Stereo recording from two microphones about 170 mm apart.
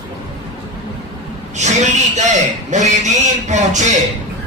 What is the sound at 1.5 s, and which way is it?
A man's voice, 45° right (ahead or behind).